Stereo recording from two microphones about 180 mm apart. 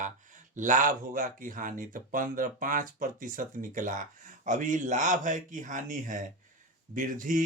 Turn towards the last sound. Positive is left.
turn(degrees=-50)  # may be behind; listen again after turning